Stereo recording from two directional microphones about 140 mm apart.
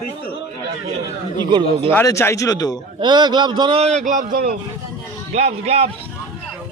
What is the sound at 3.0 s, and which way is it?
Speech, 30° right (ahead or behind).